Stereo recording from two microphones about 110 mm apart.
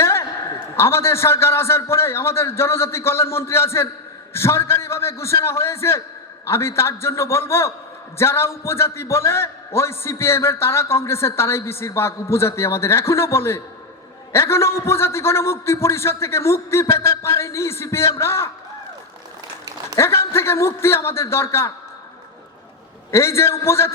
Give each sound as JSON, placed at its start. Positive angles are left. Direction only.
{"t": 0.0, "sound": "a sound", "side_deg": 25}
{"t": 0.8, "sound": "a man's voice", "side_deg": 25}
{"t": 20.0, "sound": "a man's voice", "side_deg": 25}
{"t": 23.1, "sound": "a man's voice", "side_deg": 25}